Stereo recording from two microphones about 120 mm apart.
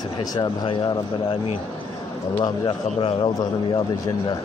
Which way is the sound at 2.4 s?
40° left (ahead or behind).